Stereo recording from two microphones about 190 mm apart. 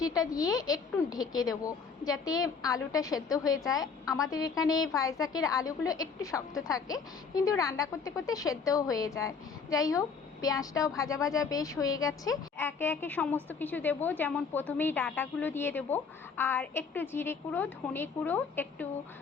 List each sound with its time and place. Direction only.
0.0 s a woman's voice: 20° left (ahead or behind)